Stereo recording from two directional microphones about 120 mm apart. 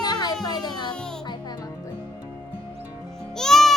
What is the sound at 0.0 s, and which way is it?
Music, 35° left (ahead or behind).